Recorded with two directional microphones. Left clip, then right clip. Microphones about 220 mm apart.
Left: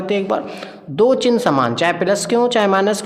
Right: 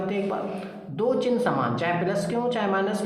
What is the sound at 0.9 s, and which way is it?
A woman's voice, 50° left (ahead or behind).